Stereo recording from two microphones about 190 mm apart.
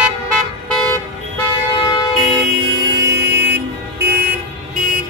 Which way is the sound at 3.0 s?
15° right (ahead or behind).